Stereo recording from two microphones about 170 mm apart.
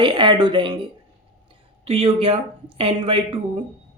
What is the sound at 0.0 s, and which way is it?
A woman's voice, 30° right (ahead or behind).